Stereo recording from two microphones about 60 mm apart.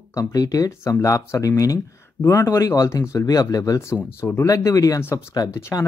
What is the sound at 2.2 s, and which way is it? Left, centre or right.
Speech, left.